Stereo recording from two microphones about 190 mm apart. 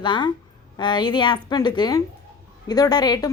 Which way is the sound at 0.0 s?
25° left (ahead or behind).